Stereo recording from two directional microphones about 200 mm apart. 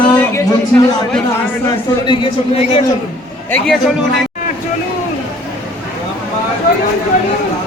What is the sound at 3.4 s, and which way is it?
Speech, 5° left (ahead or behind).